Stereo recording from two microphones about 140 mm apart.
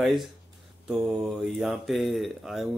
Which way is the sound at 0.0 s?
Centre (ahead or behind).